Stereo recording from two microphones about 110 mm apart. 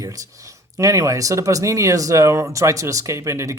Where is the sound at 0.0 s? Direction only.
30° right (ahead or behind).